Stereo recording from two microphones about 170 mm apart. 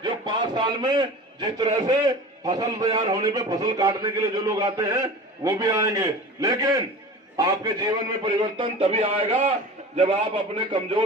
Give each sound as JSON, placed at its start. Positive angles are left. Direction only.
{"t": 0.0, "sound": "a man's voice", "side_deg": -25}